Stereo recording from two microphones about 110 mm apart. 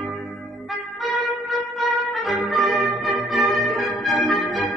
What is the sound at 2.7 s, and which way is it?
Music, 30° right (ahead or behind).